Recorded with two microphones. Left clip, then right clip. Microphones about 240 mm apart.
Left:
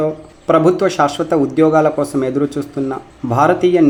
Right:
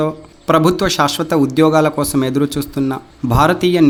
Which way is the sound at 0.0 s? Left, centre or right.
Right.